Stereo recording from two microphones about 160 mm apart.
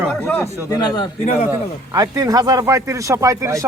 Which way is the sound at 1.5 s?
20° right (ahead or behind).